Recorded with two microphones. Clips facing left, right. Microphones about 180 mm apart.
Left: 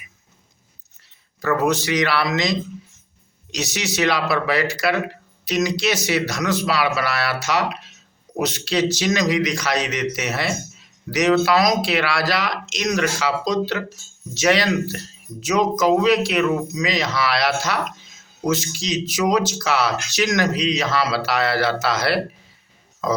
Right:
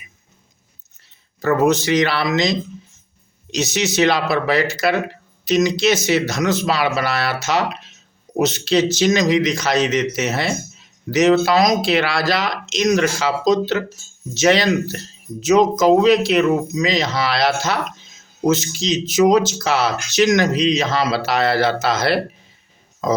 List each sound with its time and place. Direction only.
1.4 s speech: 25° right (ahead or behind)